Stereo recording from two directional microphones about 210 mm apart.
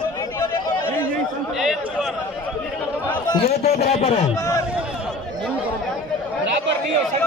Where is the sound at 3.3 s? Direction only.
30° left (ahead or behind).